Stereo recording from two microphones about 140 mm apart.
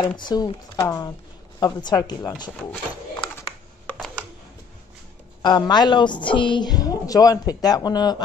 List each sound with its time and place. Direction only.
0.2 s a woman's voice: 30° left (ahead or behind)
5.4 s a woman's voice: 30° left (ahead or behind)